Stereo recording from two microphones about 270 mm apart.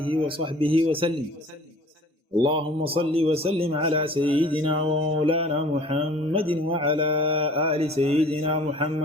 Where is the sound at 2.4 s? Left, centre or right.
Centre.